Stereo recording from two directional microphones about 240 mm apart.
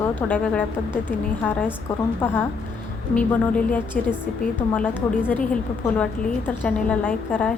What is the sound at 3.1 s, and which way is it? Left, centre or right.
A woman's voice, centre.